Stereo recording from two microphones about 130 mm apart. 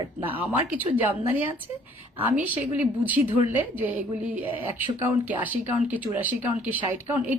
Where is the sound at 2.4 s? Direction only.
15° right (ahead or behind).